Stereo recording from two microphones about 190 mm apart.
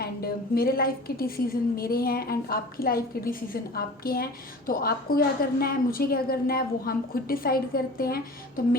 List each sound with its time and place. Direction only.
0.0 s a woman's voice: 50° left (ahead or behind)